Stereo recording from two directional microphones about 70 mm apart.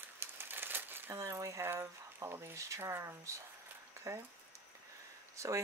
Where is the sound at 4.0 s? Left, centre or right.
Right.